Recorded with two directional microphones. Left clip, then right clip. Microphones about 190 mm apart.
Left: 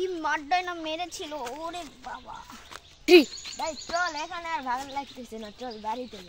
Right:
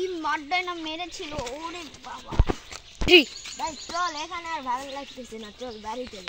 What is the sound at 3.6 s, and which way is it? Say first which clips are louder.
Speech: even; 20° left (ahead or behind).